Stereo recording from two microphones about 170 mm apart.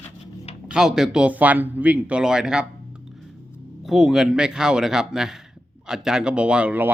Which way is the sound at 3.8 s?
5° right (ahead or behind).